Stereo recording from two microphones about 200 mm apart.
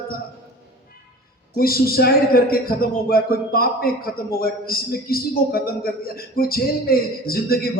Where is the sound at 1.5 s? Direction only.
50° left (ahead or behind).